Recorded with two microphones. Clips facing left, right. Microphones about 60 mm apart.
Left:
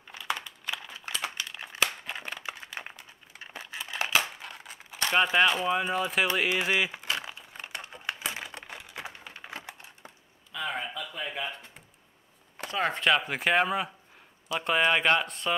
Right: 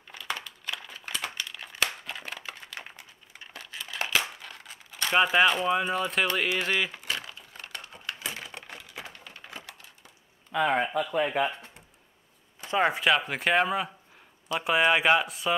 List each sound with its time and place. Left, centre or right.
0.1 s a sound: centre
1.4 s crumpling: centre
3.5 s a sound: centre
5.1 s speech: centre
6.2 s typing: centre
9.0 s a sound: centre
10.5 s speech: right
12.6 s speech: centre
12.9 s speech: centre